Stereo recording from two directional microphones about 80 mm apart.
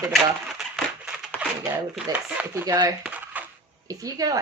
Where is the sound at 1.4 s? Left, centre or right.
Centre.